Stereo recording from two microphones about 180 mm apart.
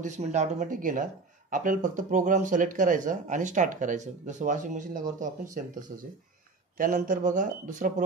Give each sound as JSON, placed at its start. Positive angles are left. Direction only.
{"t": 0.0, "sound": "speech", "side_deg": -40}